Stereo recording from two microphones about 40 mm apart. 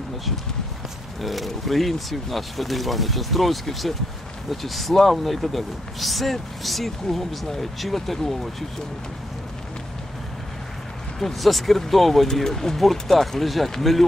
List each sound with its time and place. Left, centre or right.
1.2 s speech: centre
11.1 s speech: centre